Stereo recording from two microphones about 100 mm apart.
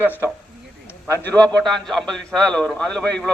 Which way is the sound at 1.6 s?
5° left (ahead or behind).